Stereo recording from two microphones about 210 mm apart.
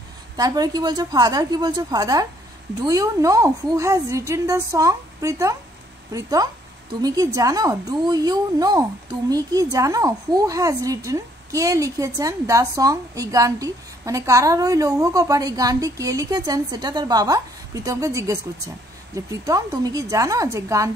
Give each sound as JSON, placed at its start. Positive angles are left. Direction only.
{"t": 0.4, "sound": "a woman's voice", "side_deg": -20}